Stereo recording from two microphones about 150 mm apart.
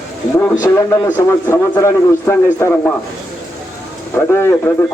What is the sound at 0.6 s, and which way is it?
A man's voice, 20° left (ahead or behind).